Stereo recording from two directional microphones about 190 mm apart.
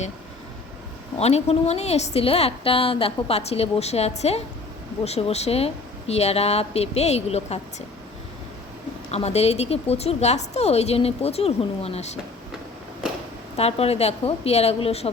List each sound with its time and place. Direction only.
1.2 s a woman's voice: 35° left (ahead or behind)
9.0 s a woman's voice: 35° left (ahead or behind)
13.6 s a woman's voice: 30° left (ahead or behind)